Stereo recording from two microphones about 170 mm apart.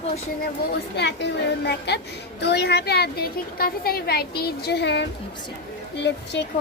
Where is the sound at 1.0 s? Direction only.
90° left.